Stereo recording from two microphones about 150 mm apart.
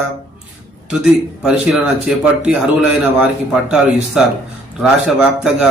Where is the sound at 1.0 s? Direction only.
5° right (ahead or behind).